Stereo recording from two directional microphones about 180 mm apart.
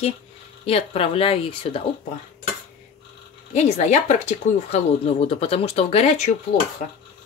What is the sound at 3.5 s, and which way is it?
Speech, 40° left (ahead or behind).